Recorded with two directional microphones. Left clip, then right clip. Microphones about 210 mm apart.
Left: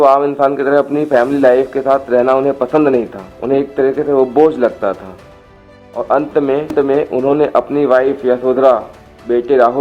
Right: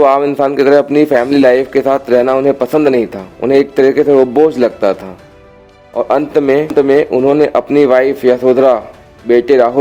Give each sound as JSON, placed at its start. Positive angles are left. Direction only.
{"t": 0.0, "sound": "a man's voice", "side_deg": -40}
{"t": 6.0, "sound": "a man's voice", "side_deg": -45}